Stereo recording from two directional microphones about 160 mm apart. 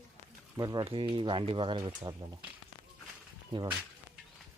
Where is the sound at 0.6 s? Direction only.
25° right (ahead or behind).